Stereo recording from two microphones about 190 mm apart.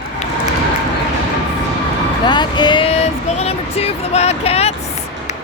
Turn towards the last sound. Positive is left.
turn(degrees=35)  # may be behind; listen again after turning